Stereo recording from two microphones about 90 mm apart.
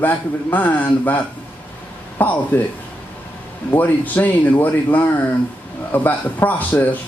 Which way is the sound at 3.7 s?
20° left (ahead or behind).